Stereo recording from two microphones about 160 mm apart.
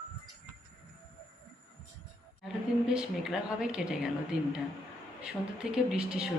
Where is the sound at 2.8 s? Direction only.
5° right (ahead or behind).